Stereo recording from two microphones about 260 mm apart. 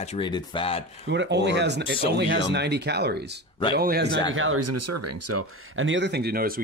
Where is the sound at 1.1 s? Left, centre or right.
Right.